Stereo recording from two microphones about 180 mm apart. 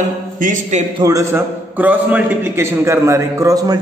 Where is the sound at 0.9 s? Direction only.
20° right (ahead or behind).